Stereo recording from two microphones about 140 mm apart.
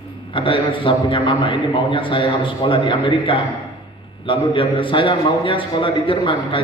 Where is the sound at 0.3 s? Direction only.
35° left (ahead or behind).